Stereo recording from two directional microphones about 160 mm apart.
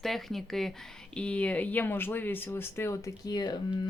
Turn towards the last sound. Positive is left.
turn(degrees=25)  # may be behind; listen again after turning